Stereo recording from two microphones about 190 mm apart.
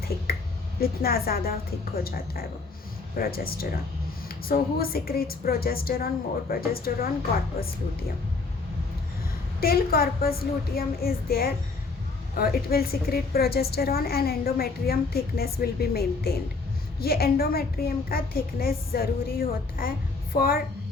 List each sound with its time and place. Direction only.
0.8 s a woman's voice: 50° left (ahead or behind)
9.6 s a woman's voice: 55° left (ahead or behind)